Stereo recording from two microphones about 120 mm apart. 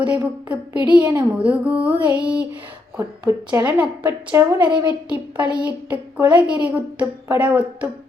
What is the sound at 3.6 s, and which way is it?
Speech, 10° right (ahead or behind).